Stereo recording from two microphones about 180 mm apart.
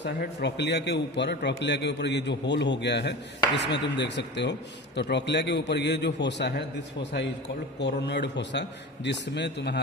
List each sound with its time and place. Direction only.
0.0 s a man's voice: 70° left (ahead or behind)